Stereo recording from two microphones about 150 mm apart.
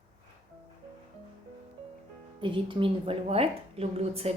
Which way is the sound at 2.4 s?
35° right (ahead or behind).